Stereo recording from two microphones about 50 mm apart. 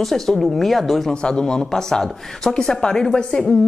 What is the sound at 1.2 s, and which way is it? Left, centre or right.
Speech, centre.